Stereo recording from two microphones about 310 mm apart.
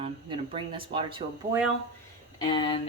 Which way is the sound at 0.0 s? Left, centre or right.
Centre.